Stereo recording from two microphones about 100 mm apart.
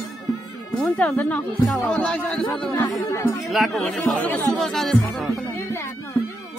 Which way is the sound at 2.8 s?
35° left (ahead or behind).